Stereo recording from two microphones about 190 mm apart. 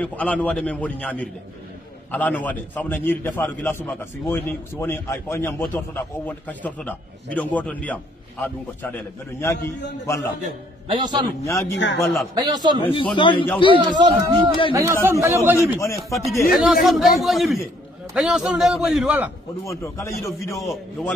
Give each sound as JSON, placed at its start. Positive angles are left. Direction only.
{"t": 0.0, "sound": "a man's voice", "side_deg": 5}
{"t": 10.9, "sound": "a man's voice", "side_deg": -25}
{"t": 11.4, "sound": "a man's voice", "side_deg": 15}
{"t": 12.4, "sound": "a man's voice", "side_deg": -20}
{"t": 12.8, "sound": "a man's voice", "side_deg": 25}
{"t": 13.7, "sound": "a man's voice", "side_deg": -25}
{"t": 15.8, "sound": "a man's voice", "side_deg": 15}
{"t": 16.5, "sound": "a man's voice", "side_deg": 0}
{"t": 19.6, "sound": "a man's voice", "side_deg": 15}